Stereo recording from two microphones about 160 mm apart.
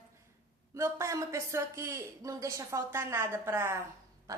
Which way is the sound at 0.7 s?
15° right (ahead or behind).